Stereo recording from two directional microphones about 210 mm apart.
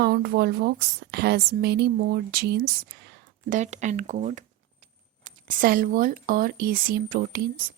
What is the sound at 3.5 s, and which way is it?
A woman's voice, 35° right (ahead or behind).